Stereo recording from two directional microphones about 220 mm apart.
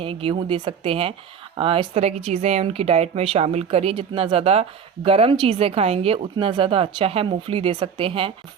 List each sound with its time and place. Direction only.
0.0 s speech: 25° right (ahead or behind)